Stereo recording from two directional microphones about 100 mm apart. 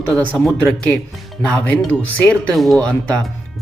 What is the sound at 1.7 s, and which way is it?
Speech, 15° left (ahead or behind).